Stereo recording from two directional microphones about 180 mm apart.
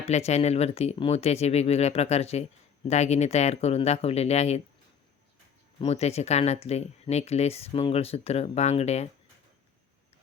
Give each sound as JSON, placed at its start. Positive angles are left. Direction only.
{"t": 0.0, "sound": "speech", "side_deg": 35}
{"t": 5.8, "sound": "speech", "side_deg": 35}